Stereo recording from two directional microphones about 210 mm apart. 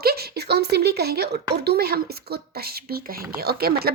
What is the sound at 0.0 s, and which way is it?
A woman's voice, 50° right (ahead or behind).